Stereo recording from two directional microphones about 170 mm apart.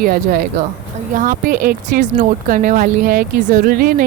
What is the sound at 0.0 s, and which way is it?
Speech, 60° right (ahead or behind).